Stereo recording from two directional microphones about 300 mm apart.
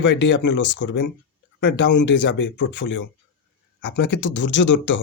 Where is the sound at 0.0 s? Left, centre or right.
Left.